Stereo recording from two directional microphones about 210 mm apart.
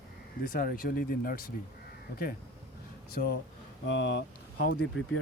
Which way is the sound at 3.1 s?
50° left (ahead or behind).